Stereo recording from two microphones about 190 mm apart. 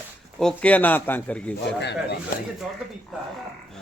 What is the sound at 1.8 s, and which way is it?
Speech, 65° left (ahead or behind).